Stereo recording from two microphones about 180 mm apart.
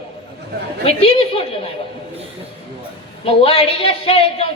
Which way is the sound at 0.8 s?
35° left (ahead or behind).